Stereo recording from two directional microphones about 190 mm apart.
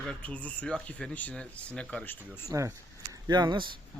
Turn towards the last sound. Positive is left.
turn(degrees=-25)  # may be behind; listen again after turning